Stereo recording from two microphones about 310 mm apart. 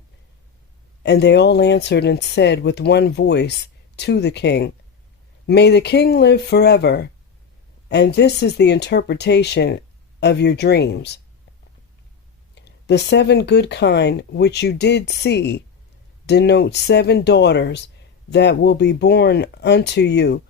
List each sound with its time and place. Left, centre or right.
1.0 s speech: left
12.5 s speech: left